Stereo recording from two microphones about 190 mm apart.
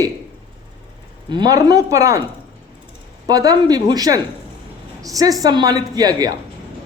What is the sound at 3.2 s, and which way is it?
A woman's voice, 20° right (ahead or behind).